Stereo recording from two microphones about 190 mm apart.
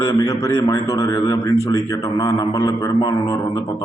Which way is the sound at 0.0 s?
15° left (ahead or behind).